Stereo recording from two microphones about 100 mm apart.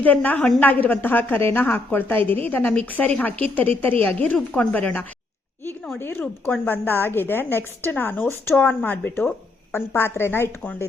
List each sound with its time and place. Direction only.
0.0 s a woman's voice: 15° left (ahead or behind)